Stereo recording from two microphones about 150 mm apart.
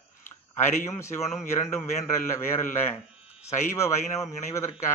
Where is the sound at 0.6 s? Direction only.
15° left (ahead or behind).